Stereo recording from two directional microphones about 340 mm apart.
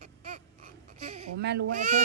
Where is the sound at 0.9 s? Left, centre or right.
Centre.